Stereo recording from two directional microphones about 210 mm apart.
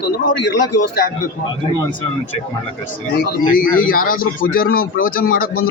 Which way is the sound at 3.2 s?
45° left (ahead or behind).